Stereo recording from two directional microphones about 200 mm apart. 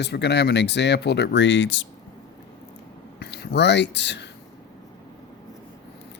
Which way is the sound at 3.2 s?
55° left (ahead or behind).